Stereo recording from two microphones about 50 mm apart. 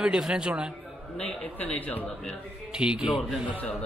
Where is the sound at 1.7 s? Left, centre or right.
Left.